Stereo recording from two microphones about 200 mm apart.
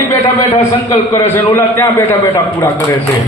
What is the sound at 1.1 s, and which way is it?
A man's voice, 10° left (ahead or behind).